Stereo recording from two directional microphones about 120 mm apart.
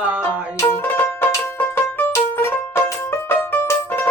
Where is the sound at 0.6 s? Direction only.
20° left (ahead or behind).